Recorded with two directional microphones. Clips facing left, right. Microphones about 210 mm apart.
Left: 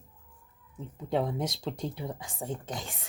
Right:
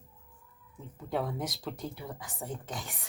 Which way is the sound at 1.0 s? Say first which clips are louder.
Left 4 dB; 25° left (ahead or behind).